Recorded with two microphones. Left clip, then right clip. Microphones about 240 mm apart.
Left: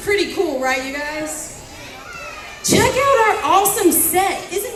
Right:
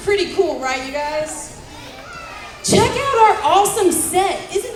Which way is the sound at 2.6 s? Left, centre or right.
Right.